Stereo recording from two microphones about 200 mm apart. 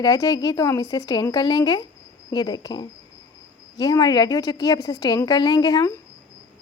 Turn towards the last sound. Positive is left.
turn(degrees=20)  # may be behind; listen again after turning